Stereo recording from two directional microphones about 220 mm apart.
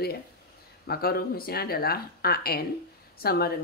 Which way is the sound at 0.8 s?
45° left (ahead or behind).